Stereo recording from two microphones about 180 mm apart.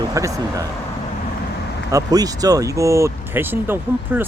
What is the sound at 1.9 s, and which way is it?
Speech, 20° right (ahead or behind).